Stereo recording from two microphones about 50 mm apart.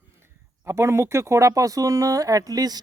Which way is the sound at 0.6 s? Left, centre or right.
Right.